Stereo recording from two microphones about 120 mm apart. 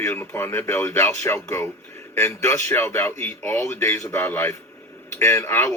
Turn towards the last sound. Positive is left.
turn(degrees=20)  # may be behind; listen again after turning